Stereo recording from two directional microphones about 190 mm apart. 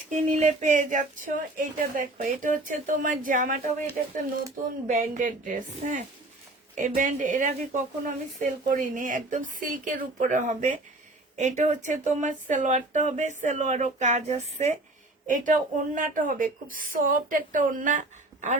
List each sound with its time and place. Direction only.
0.3 s a woman's voice: 40° right (ahead or behind)